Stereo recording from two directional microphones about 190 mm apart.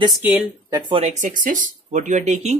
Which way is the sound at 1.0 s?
40° right (ahead or behind).